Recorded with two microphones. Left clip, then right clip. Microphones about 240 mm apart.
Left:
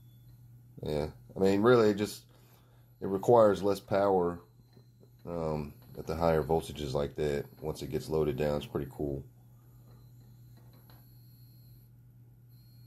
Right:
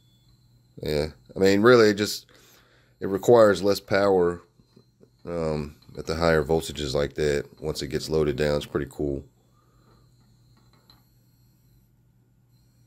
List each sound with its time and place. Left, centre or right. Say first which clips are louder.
0.7 s speech: right 7 dB; right